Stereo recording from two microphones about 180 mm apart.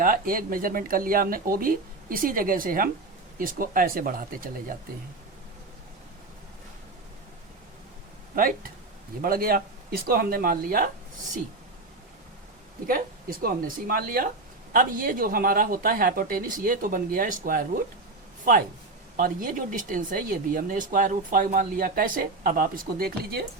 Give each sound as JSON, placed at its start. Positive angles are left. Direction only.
{"t": 0.0, "sound": "speech", "side_deg": -50}
{"t": 9.2, "sound": "speech", "side_deg": -55}
{"t": 12.9, "sound": "speech", "side_deg": -55}
{"t": 19.1, "sound": "speech", "side_deg": -50}